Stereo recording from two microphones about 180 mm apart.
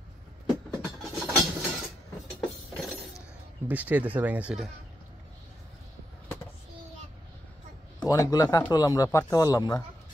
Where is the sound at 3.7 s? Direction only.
10° right (ahead or behind).